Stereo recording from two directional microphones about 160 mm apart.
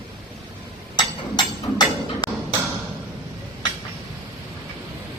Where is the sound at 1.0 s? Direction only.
25° left (ahead or behind).